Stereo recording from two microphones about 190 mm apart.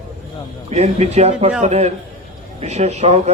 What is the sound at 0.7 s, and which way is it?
A man's voice, 35° right (ahead or behind).